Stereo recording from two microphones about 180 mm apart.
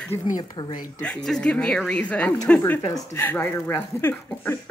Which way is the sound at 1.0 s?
5° left (ahead or behind).